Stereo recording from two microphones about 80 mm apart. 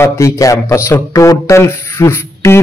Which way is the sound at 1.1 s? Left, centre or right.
Left.